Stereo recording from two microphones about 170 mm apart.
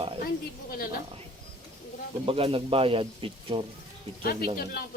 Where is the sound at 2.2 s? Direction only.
35° right (ahead or behind).